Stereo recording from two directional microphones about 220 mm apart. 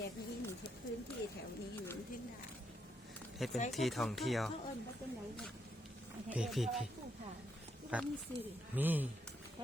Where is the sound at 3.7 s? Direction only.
Centre (ahead or behind).